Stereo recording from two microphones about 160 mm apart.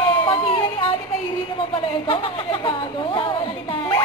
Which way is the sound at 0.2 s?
30° left (ahead or behind).